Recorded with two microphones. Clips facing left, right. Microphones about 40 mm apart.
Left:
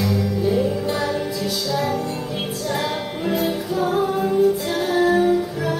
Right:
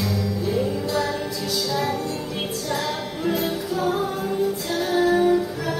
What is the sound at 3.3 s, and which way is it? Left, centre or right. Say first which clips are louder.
Music: left 2 dB; centre.